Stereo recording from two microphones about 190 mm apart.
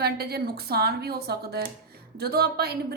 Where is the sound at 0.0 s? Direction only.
55° right (ahead or behind).